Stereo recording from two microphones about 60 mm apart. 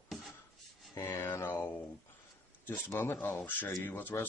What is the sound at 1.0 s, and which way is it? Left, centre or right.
Speech, left.